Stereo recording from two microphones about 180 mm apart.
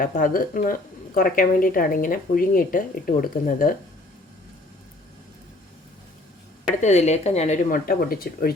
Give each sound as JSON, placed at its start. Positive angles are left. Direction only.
{"t": 0.0, "sound": "speech", "side_deg": 50}
{"t": 6.8, "sound": "speech", "side_deg": 40}